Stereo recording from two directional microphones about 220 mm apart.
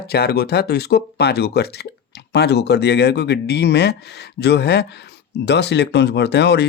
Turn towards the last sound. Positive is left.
turn(degrees=50)  # may be behind; listen again after turning